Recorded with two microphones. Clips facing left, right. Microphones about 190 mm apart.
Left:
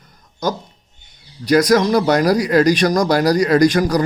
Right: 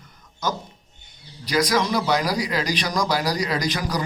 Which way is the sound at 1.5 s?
50° left (ahead or behind).